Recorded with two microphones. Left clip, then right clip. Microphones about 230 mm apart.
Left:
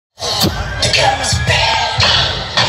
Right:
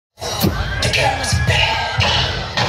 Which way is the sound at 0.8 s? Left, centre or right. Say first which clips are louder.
Left 5 dB; left.